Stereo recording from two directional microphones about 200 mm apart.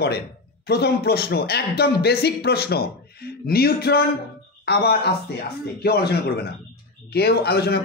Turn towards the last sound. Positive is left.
turn(degrees=55)  # may be behind; listen again after turning